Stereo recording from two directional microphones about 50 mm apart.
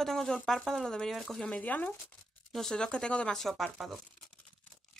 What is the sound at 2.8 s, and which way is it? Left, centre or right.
Speech, centre.